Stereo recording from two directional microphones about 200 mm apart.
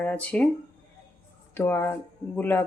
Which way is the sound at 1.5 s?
10° left (ahead or behind).